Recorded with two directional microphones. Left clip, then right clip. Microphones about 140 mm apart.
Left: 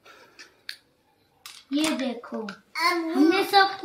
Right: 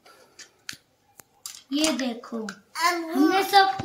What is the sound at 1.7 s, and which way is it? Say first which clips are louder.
Speech: right 1 dB; 10° right (ahead or behind).